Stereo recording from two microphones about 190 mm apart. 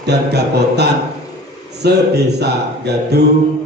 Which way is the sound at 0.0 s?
60° right (ahead or behind).